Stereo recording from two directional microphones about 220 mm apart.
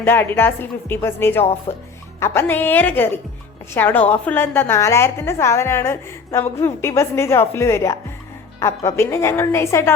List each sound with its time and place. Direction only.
0.0 s a woman's voice: 10° left (ahead or behind)
1.7 s speech: 25° left (ahead or behind)
2.2 s a woman's voice: 10° left (ahead or behind)